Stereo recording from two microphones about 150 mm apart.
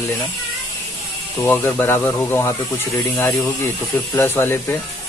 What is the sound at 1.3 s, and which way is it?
Speech, 15° left (ahead or behind).